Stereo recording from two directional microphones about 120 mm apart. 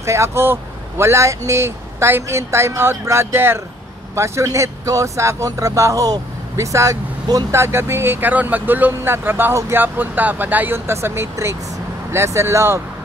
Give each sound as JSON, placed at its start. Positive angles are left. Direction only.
{"t": 0.0, "sound": "speech", "side_deg": -25}